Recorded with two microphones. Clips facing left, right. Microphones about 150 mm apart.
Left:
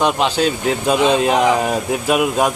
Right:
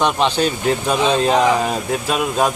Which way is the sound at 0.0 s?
5° left (ahead or behind).